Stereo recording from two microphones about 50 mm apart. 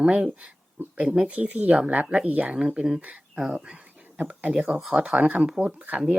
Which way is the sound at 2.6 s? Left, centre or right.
Centre.